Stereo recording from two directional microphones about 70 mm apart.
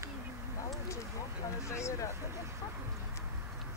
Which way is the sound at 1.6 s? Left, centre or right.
Left.